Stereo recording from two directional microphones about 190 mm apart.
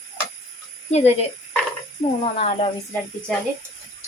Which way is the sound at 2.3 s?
35° left (ahead or behind).